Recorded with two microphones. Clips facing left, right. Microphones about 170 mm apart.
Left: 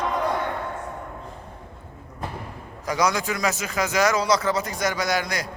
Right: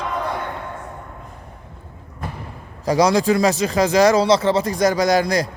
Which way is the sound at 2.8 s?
35° right (ahead or behind).